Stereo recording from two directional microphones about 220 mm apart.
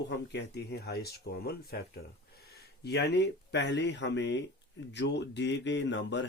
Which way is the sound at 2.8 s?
50° left (ahead or behind).